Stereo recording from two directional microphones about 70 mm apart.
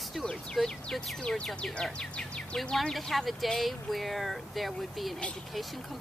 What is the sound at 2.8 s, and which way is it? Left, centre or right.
Speech, centre.